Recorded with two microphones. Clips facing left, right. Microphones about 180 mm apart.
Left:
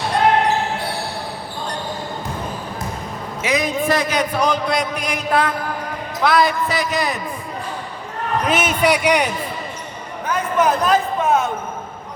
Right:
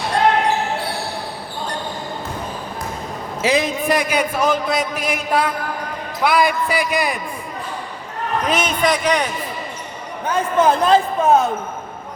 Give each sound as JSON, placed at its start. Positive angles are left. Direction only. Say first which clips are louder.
{"t": 3.4, "sound": "a man's voice", "louder": "right 3 dB", "side_deg": -30}
{"t": 3.8, "sound": "speech", "louder": "even", "side_deg": -10}
{"t": 8.4, "sound": "a man's voice", "louder": "left 1 dB", "side_deg": 5}
{"t": 10.2, "sound": "a sound", "louder": "right 2 dB", "side_deg": -30}